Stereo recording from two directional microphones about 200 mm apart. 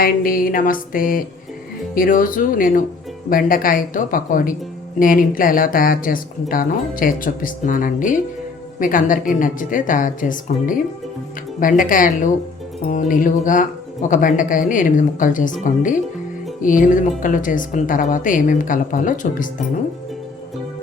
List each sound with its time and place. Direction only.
0.0 s a woman's voice: 45° left (ahead or behind)